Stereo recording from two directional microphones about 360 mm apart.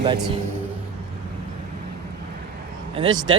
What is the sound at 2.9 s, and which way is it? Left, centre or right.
Speech, centre.